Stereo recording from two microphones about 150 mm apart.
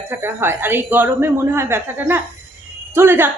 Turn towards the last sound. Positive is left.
turn(degrees=-15)  # may be behind; listen again after turning